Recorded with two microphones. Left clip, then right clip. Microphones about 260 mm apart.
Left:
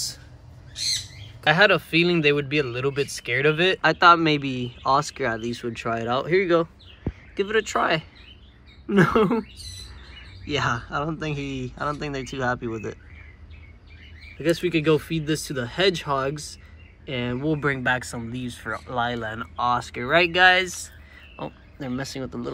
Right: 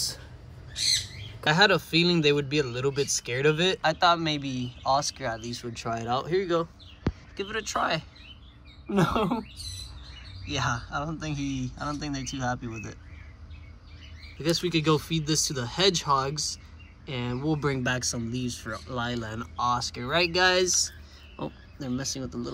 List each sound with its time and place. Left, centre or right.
1.4 s speech: centre
7.3 s speech: centre
9.6 s bird: centre
10.4 s speech: centre
14.4 s speech: centre